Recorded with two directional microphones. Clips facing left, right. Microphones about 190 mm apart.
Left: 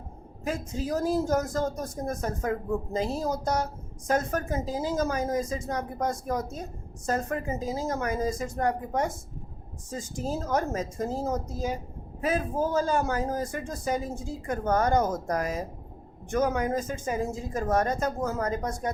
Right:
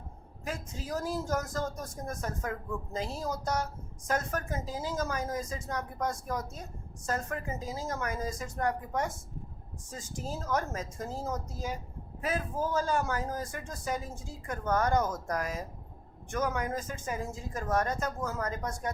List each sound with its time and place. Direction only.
0.4 s speech: 20° left (ahead or behind)
12.2 s speech: 25° left (ahead or behind)
15.0 s speech: 30° left (ahead or behind)